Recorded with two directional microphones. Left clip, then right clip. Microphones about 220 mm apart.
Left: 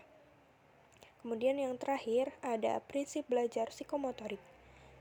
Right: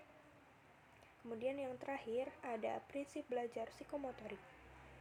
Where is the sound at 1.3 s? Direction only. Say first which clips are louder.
Left 9 dB; 40° left (ahead or behind).